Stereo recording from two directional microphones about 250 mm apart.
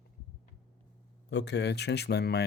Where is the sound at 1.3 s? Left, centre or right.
Left.